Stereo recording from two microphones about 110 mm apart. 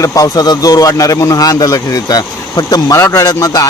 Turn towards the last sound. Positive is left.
turn(degrees=35)  # may be behind; listen again after turning